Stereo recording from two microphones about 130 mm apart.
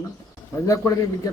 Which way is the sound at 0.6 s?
20° left (ahead or behind).